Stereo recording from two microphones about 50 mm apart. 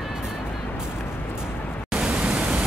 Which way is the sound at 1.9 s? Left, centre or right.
Centre.